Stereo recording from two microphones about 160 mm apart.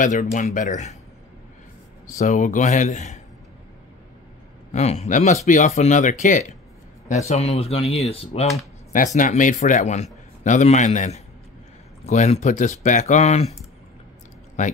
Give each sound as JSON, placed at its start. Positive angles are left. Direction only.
{"t": 0.0, "sound": "speech", "side_deg": 50}
{"t": 2.1, "sound": "speech", "side_deg": 50}
{"t": 4.7, "sound": "speech", "side_deg": 45}
{"t": 8.9, "sound": "speech", "side_deg": 55}
{"t": 14.6, "sound": "speech", "side_deg": 50}